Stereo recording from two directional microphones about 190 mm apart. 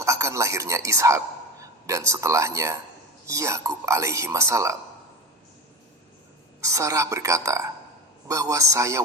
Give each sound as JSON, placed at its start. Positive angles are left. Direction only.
{"t": 0.0, "sound": "a woman's voice", "side_deg": -15}
{"t": 6.6, "sound": "speech", "side_deg": -15}